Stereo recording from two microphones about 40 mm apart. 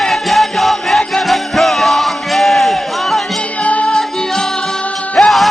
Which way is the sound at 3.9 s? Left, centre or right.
Centre.